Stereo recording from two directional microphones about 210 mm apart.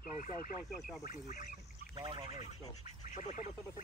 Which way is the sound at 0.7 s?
Centre (ahead or behind).